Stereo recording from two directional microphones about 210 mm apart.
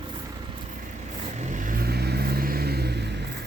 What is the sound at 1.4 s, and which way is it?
Vehicle, 40° right (ahead or behind).